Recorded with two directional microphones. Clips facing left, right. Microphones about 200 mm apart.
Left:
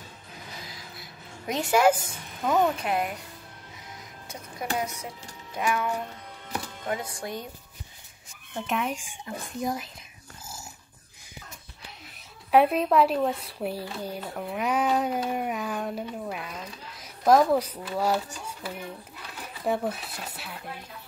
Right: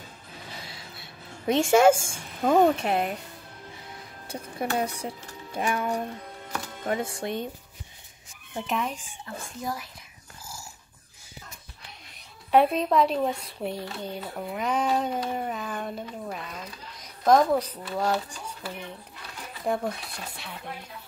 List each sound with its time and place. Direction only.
0.6 s a sound: 30° right (ahead or behind)
2.7 s music: 25° right (ahead or behind)
4.3 s music: 30° right (ahead or behind)
8.6 s speech: 5° left (ahead or behind)
12.4 s speech: 5° left (ahead or behind)